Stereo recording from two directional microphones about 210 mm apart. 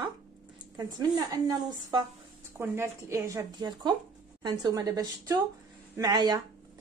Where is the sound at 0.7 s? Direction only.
20° right (ahead or behind).